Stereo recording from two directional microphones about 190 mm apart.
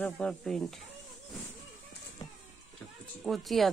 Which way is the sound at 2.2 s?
20° left (ahead or behind).